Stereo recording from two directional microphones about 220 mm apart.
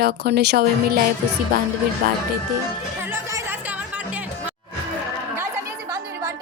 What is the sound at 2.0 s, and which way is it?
Speech, 40° right (ahead or behind).